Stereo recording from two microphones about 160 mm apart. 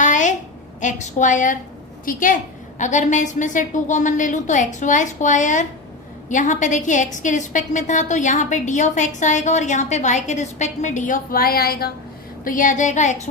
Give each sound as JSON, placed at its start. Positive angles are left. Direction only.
{"t": 0.0, "sound": "a sound", "side_deg": 50}
{"t": 0.8, "sound": "a woman's voice", "side_deg": 50}
{"t": 12.5, "sound": "a woman's voice", "side_deg": 55}